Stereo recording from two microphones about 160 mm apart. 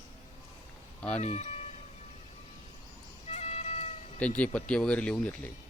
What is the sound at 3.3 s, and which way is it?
Cat, 45° left (ahead or behind).